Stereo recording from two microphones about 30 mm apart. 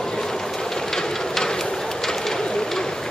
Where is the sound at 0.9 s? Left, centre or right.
Left.